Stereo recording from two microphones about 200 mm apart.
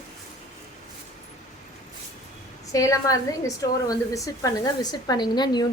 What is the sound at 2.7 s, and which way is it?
A woman's voice, 15° left (ahead or behind).